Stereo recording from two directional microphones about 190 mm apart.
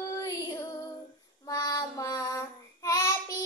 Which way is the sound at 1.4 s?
20° left (ahead or behind).